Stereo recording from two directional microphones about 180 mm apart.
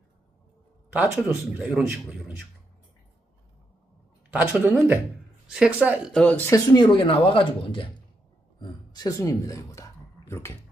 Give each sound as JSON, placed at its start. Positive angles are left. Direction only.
{"t": 0.9, "sound": "a man's voice", "side_deg": -5}
{"t": 4.3, "sound": "a man's voice", "side_deg": -10}
{"t": 6.1, "sound": "speech", "side_deg": 10}